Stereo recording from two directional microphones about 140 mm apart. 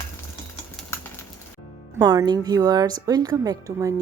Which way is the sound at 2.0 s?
30° right (ahead or behind).